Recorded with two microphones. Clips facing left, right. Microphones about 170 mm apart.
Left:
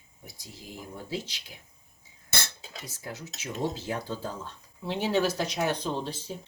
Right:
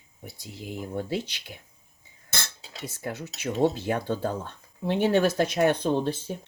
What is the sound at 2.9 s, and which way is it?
Speech, 60° right (ahead or behind).